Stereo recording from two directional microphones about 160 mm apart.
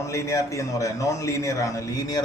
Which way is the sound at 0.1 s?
20° left (ahead or behind).